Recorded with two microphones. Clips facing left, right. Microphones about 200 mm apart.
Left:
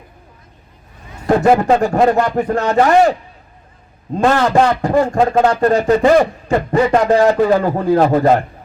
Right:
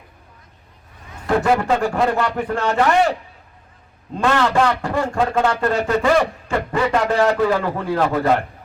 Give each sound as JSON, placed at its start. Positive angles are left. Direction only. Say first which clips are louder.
{"t": 1.3, "sound": "a man's voice", "louder": "left 6 dB", "side_deg": 40}
{"t": 4.2, "sound": "a man's voice", "louder": "left 4 dB", "side_deg": 40}
{"t": 8.1, "sound": "a man's voice", "louder": "left 5 dB", "side_deg": 30}